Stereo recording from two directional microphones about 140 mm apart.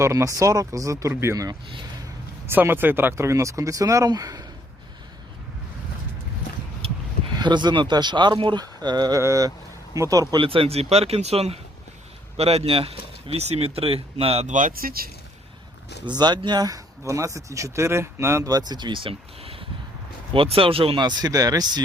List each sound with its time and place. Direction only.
0.0 s speech: 20° right (ahead or behind)
7.3 s speech: 30° right (ahead or behind)
10.4 s speech: 40° right (ahead or behind); by 15.1 s 90° right
16.0 s speech: 30° right (ahead or behind)